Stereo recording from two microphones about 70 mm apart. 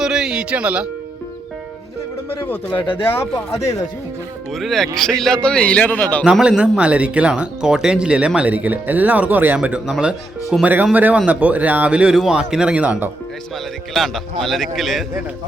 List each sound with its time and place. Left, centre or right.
0.0 s speech: centre
2.3 s speech: left
4.5 s a man's voice: centre; by 6.2 s left
6.6 s speech: centre
13.9 s a man's voice: centre